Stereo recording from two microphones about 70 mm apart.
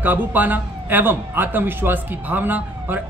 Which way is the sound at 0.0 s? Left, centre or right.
Right.